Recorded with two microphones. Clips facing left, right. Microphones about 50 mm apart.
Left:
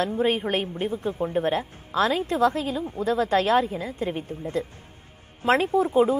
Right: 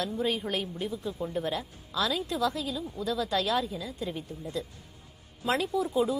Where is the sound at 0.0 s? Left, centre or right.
Left.